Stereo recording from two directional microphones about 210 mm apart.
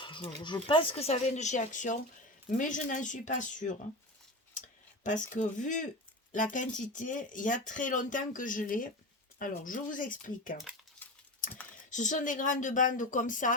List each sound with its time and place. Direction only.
0.0 s speech: 25° left (ahead or behind)
5.0 s speech: 35° left (ahead or behind)
11.0 s typing: 10° left (ahead or behind)
11.9 s speech: 35° left (ahead or behind)